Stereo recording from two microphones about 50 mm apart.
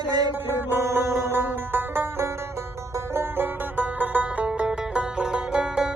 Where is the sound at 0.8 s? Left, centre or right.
Right.